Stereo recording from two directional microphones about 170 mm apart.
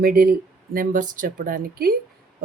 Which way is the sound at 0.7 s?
50° right (ahead or behind).